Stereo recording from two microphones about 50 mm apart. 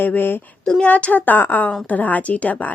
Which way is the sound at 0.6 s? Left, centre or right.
Centre.